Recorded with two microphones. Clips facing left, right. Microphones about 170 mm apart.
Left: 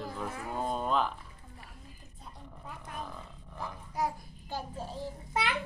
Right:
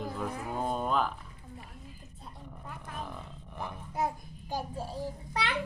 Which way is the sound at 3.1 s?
20° right (ahead or behind).